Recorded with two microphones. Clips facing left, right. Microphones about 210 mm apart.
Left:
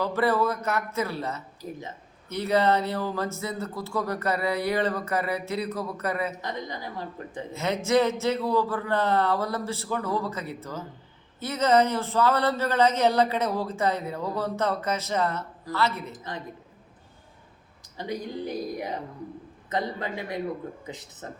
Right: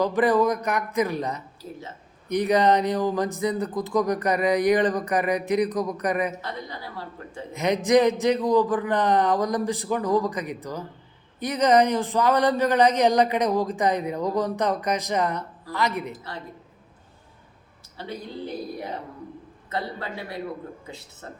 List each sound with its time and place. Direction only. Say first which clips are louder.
0.0 s speech: right 4 dB; 15° right (ahead or behind)
6.4 s speech: left 1 dB; 15° left (ahead or behind)
7.5 s speech: right 4 dB; 15° right (ahead or behind)
16.1 s a man's voice: left 1 dB; 20° left (ahead or behind)
17.9 s a man's voice: left 2 dB; 15° left (ahead or behind)